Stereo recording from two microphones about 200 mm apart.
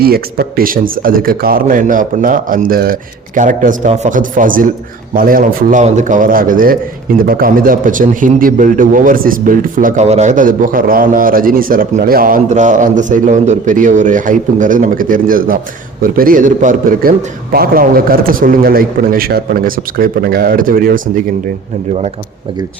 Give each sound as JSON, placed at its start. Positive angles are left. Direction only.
{"t": 0.0, "sound": "a man's voice", "side_deg": -50}